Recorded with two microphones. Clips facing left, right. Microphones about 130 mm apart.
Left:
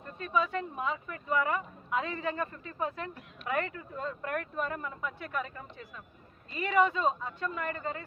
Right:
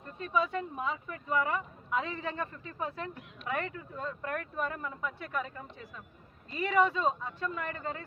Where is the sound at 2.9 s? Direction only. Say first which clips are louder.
Even; 30° right (ahead or behind).